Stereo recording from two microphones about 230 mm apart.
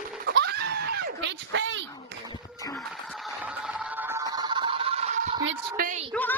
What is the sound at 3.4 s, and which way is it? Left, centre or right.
Music, centre.